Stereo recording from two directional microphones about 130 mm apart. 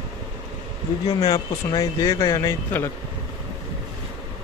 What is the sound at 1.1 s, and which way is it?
Speech, 30° left (ahead or behind).